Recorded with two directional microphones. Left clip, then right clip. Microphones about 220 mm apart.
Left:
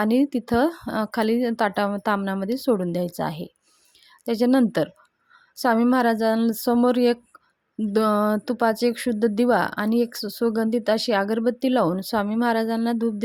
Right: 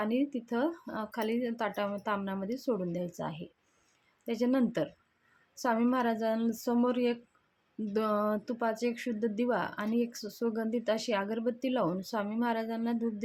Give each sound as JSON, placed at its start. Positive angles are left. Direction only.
{"t": 0.0, "sound": "speech", "side_deg": 45}